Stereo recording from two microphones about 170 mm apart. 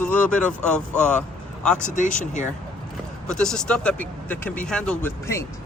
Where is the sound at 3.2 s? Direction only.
5° left (ahead or behind).